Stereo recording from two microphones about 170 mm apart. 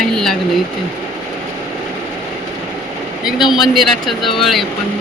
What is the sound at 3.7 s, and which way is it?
Speech, centre (ahead or behind).